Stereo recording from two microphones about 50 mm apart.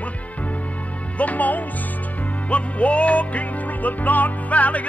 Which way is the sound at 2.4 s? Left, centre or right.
Left.